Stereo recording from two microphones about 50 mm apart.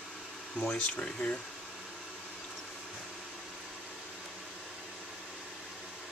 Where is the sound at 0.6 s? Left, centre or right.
Centre.